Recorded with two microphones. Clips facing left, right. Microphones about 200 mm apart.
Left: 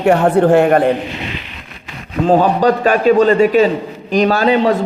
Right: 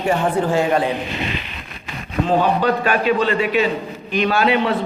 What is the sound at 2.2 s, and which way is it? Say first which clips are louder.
A man's voice: left 6 dB; 45° left (ahead or behind).